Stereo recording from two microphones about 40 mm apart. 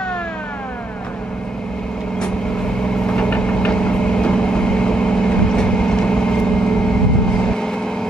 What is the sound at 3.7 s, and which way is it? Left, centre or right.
Vehicle, left.